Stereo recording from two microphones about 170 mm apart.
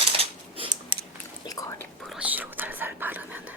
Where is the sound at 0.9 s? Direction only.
30° right (ahead or behind).